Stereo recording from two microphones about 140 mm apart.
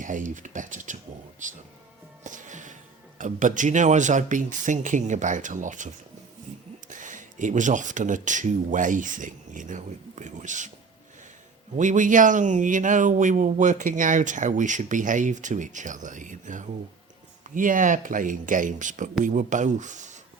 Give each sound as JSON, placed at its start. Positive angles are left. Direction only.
{"t": 0.0, "sound": "speech", "side_deg": -65}
{"t": 2.2, "sound": "music", "side_deg": -65}
{"t": 3.2, "sound": "speech", "side_deg": -65}
{"t": 11.8, "sound": "speech", "side_deg": -65}